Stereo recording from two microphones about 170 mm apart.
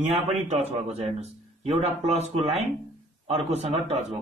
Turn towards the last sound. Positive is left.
turn(degrees=-40)  # may be behind; listen again after turning